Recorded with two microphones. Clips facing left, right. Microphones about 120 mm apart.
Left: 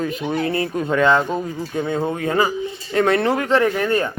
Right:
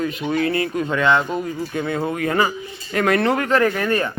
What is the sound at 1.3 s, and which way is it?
Speech, 25° left (ahead or behind).